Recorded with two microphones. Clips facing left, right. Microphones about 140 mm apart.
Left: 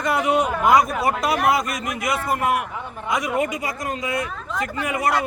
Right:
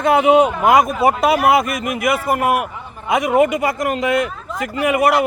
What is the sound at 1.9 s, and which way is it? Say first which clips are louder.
A man's voice: right 5 dB; 60° right (ahead or behind).